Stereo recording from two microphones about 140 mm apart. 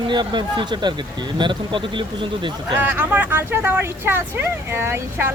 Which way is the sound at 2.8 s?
10° right (ahead or behind).